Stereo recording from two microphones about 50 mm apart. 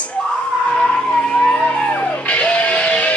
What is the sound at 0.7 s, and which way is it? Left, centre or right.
Vehicle, centre.